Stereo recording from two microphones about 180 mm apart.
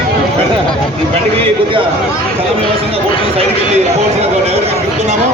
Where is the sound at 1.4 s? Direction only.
30° right (ahead or behind).